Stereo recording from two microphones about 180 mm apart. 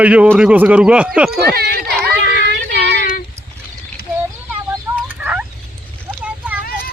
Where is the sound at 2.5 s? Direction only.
70° right (ahead or behind).